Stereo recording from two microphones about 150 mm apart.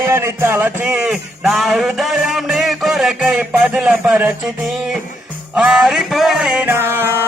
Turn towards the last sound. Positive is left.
turn(degrees=-15)  # may be behind; listen again after turning